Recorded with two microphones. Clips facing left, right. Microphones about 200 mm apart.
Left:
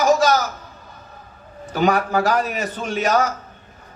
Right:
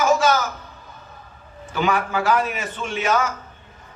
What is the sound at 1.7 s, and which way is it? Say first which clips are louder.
A man's voice: left 4 dB; 40° left (ahead or behind).